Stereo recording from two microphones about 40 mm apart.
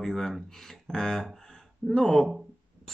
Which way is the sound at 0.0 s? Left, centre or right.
Centre.